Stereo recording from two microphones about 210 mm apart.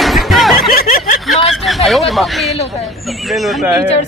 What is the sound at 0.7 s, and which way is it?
Snicker, 40° left (ahead or behind).